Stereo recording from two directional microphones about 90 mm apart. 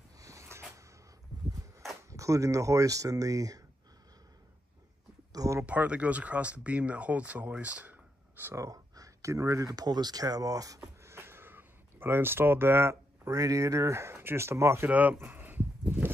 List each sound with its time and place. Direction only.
0.2 s a sound: 35° right (ahead or behind)
2.0 s speech: 35° right (ahead or behind)
5.3 s a sound: 40° right (ahead or behind)
5.7 s speech: 15° right (ahead or behind); by 10.8 s 40° right (ahead or behind)
11.0 s speech: 30° right (ahead or behind)
14.9 s speech: 15° right (ahead or behind)